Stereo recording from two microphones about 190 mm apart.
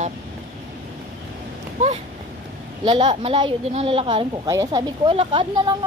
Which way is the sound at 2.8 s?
30° right (ahead or behind).